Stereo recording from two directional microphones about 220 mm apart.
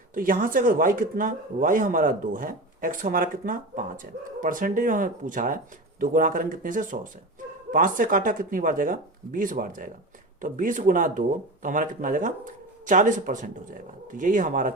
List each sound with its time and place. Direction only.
0.1 s speech: 40° right (ahead or behind)